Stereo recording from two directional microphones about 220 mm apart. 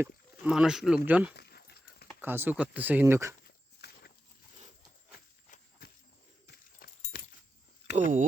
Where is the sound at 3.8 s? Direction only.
45° left (ahead or behind).